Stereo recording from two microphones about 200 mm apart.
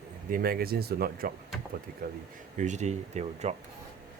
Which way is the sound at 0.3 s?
45° right (ahead or behind).